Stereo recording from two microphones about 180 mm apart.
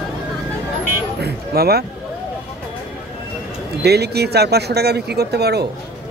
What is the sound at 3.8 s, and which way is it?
Speech, 65° right (ahead or behind).